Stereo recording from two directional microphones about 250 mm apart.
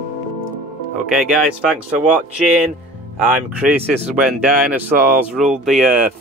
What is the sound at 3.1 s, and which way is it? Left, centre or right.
Speech, centre.